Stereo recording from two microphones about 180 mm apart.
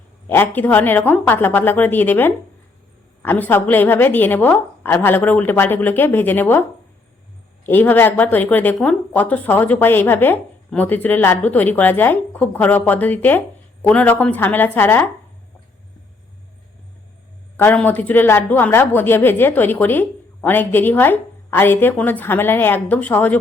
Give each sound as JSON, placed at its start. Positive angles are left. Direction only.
{"t": 0.3, "sound": "a woman's voice", "side_deg": 10}
{"t": 17.6, "sound": "a woman's voice", "side_deg": 10}